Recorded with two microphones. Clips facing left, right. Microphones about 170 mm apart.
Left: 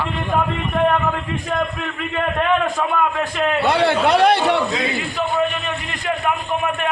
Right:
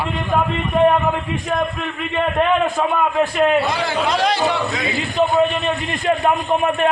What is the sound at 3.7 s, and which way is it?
Speech, 65° left (ahead or behind).